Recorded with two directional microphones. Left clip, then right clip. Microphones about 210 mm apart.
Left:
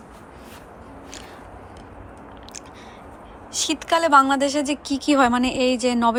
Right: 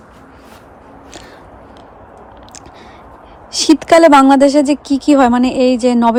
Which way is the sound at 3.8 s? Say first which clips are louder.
Right 8 dB; 25° right (ahead or behind).